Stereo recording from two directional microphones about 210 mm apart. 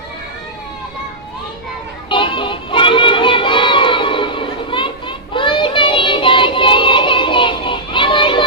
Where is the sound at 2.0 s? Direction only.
25° left (ahead or behind).